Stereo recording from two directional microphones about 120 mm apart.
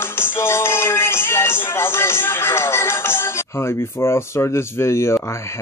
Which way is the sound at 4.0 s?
20° left (ahead or behind).